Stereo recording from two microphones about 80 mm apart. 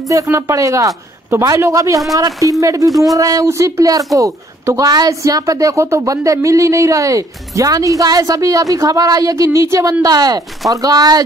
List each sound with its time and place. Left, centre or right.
0.1 s a woman's voice: right
10.0 s a woman's voice: right